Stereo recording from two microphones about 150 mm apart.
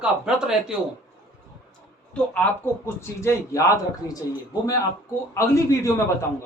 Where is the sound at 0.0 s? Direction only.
5° right (ahead or behind).